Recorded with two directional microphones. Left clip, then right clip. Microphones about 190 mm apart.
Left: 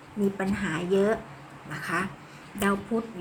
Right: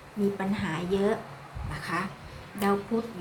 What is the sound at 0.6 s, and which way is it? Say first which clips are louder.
A woman's voice: left 5 dB; centre (ahead or behind).